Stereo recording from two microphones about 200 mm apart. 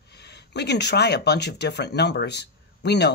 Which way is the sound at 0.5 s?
55° left (ahead or behind).